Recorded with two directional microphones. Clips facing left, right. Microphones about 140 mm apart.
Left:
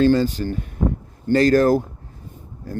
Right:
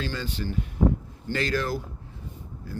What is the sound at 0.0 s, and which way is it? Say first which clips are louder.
Speech: left 15 dB; 40° left (ahead or behind).